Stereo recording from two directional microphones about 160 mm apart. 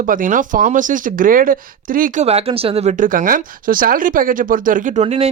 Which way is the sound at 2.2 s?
40° right (ahead or behind).